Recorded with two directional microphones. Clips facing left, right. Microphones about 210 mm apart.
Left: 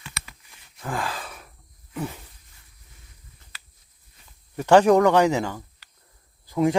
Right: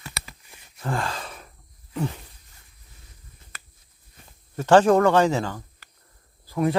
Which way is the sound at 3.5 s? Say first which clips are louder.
Right 4 dB; 50° right (ahead or behind).